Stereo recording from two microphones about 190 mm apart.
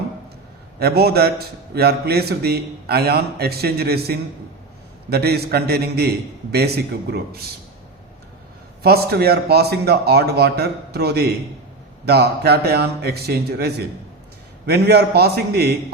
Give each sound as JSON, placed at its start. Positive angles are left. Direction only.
{"t": 0.8, "sound": "a man's voice", "side_deg": -55}
{"t": 8.8, "sound": "a man's voice", "side_deg": -55}